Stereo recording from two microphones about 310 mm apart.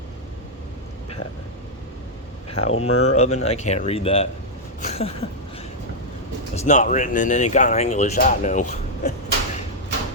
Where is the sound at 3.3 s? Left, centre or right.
Left.